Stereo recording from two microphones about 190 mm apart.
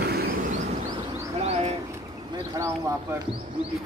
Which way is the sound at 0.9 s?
35° right (ahead or behind).